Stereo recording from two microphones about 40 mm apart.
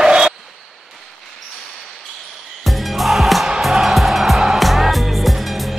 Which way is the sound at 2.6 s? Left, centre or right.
Centre.